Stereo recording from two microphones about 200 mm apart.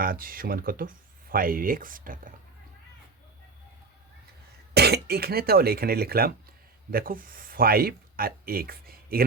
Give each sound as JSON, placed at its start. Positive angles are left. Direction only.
{"t": 0.0, "sound": "speech", "side_deg": -45}
{"t": 4.7, "sound": "speech", "side_deg": -55}